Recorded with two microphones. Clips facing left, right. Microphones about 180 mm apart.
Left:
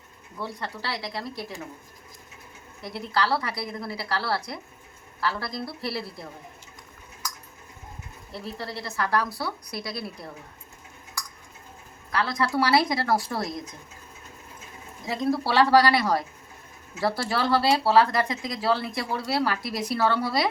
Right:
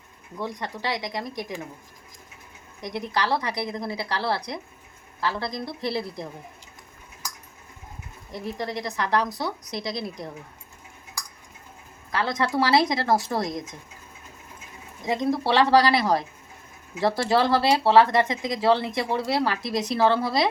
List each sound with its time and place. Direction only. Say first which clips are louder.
0.3 s speech: right 2 dB; 15° right (ahead or behind)
2.8 s speech: even; 20° right (ahead or behind)
8.3 s speech: right 4 dB; 15° right (ahead or behind)
12.1 s speech: right 1 dB; 20° right (ahead or behind)
15.0 s speech: right 2 dB; 20° right (ahead or behind)